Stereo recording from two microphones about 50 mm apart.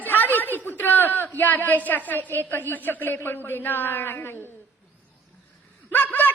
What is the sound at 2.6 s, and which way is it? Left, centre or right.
A man's voice, left.